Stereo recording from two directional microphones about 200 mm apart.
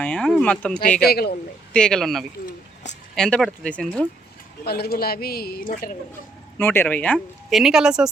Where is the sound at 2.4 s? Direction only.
35° left (ahead or behind).